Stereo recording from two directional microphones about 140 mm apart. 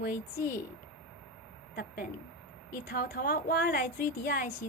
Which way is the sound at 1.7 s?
90° left.